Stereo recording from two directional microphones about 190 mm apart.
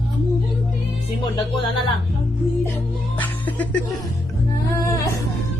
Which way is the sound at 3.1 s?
10° left (ahead or behind).